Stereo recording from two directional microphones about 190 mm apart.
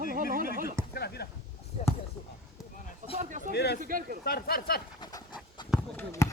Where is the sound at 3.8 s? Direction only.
45° right (ahead or behind).